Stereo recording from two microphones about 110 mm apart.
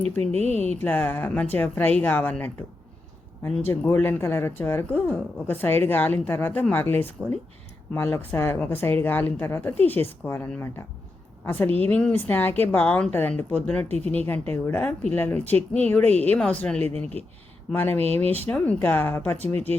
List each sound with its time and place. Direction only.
0.2 s speech: 80° right
0.8 s a woman's voice: 20° left (ahead or behind)
3.7 s a woman's voice: 20° left (ahead or behind)
16.8 s speech: 70° right (ahead or behind)
17.7 s a woman's voice: 20° left (ahead or behind)
18.0 s speech: 70° right (ahead or behind)
18.4 s a woman's voice: 10° left (ahead or behind)